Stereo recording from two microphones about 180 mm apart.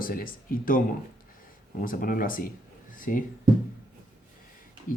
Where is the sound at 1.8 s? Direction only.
50° left (ahead or behind).